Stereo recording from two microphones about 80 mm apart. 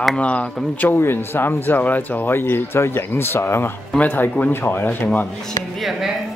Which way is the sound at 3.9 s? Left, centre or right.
Centre.